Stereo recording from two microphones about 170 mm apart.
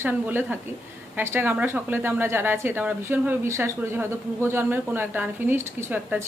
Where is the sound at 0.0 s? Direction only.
10° right (ahead or behind).